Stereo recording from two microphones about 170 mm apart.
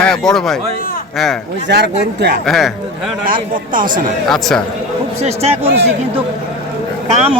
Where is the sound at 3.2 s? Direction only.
55° right (ahead or behind).